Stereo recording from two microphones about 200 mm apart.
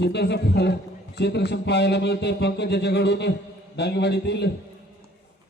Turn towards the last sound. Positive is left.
turn(degrees=55)  # may be behind; listen again after turning